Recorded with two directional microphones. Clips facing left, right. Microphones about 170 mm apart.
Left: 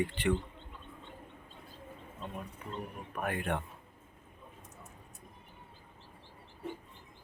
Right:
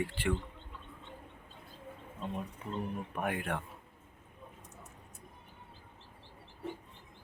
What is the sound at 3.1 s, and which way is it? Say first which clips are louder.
Speech: left 1 dB; 15° right (ahead or behind).